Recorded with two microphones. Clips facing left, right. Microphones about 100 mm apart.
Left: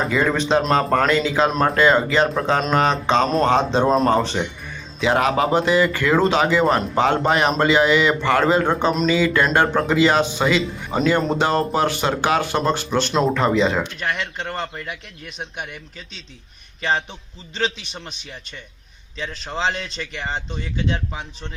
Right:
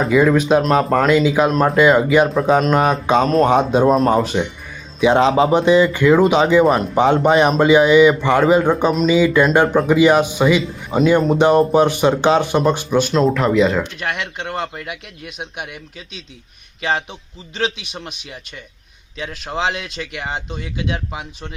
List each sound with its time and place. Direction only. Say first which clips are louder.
0.0 s speech: right 6 dB; 5° right (ahead or behind)
4.9 s speech: right 5 dB; 20° right (ahead or behind)
8.7 s a man's voice: right 3 dB; centre (ahead or behind)
9.0 s speech: right 7 dB; 15° right (ahead or behind)
10.9 s a man's voice: right 5 dB; 5° right (ahead or behind)
11.3 s speech: right 7 dB; 20° right (ahead or behind)
13.1 s a man's voice: right 2 dB; centre (ahead or behind)